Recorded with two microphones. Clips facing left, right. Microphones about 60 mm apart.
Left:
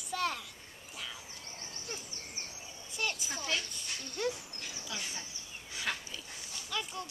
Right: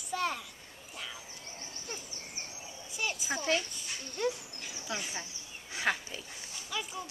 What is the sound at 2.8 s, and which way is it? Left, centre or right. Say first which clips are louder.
A child's voice: right 2 dB; centre.